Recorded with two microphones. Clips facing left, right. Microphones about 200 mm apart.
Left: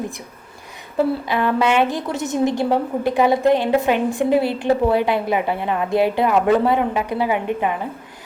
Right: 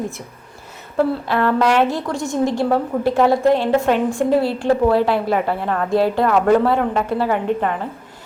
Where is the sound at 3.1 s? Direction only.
Centre (ahead or behind).